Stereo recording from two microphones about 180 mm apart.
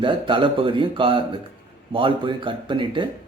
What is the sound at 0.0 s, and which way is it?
A man's voice, 30° right (ahead or behind).